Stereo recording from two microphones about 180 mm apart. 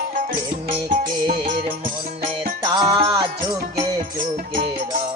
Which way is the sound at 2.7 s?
25° right (ahead or behind).